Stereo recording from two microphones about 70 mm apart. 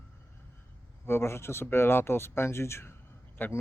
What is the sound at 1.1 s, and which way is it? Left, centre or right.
Speech, left.